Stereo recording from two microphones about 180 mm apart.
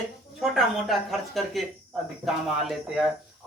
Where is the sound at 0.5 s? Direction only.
Centre (ahead or behind).